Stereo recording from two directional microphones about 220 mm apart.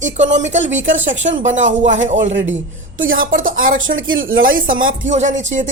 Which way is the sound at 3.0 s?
65° right (ahead or behind).